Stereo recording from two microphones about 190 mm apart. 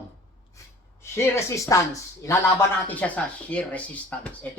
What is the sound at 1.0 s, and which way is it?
Speech, 15° left (ahead or behind).